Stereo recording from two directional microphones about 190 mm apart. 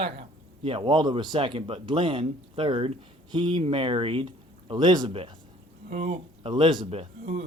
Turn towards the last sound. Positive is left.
turn(degrees=-30)  # may be behind; listen again after turning